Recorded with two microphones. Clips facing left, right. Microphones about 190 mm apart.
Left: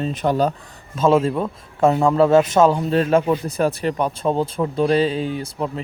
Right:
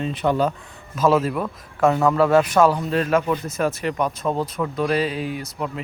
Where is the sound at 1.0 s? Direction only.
25° left (ahead or behind).